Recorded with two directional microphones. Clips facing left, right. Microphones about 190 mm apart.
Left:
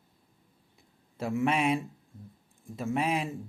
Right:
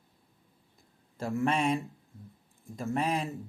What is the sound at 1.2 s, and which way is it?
Speech, 5° left (ahead or behind).